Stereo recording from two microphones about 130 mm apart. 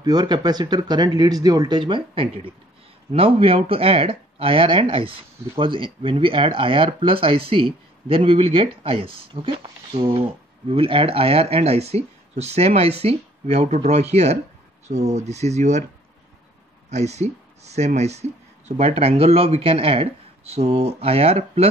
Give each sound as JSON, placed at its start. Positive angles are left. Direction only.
{"t": 0.0, "sound": "speech", "side_deg": -30}
{"t": 16.9, "sound": "speech", "side_deg": -60}